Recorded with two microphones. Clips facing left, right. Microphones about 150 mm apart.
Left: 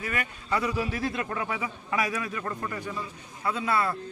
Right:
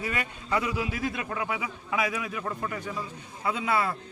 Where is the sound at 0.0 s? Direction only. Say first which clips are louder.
Right 1 dB; 15° right (ahead or behind).